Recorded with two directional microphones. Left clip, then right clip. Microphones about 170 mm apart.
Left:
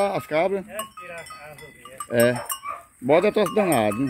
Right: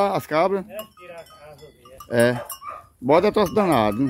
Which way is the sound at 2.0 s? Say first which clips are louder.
Right 1 dB; 20° right (ahead or behind).